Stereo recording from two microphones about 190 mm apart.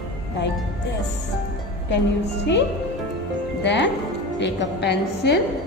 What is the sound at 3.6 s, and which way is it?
A woman's voice, 65° left (ahead or behind).